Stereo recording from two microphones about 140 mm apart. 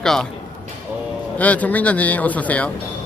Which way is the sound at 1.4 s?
10° left (ahead or behind).